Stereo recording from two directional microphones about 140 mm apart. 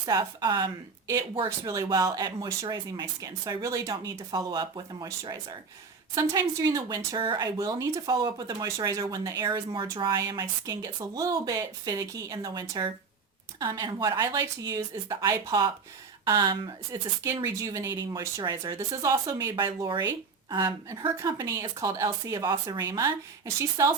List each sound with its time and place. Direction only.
0.0 s a woman's voice: 30° right (ahead or behind)
21.2 s speech: 20° right (ahead or behind)
22.8 s speech: 20° right (ahead or behind)